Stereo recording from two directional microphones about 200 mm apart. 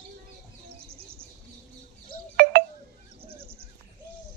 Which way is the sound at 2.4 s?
50° right (ahead or behind).